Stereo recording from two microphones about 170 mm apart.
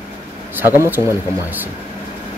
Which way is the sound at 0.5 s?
15° right (ahead or behind).